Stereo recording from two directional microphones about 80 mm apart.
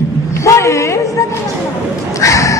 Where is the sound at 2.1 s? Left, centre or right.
Left.